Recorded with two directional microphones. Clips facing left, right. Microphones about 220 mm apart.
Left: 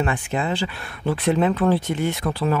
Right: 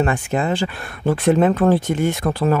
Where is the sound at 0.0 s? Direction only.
45° right (ahead or behind).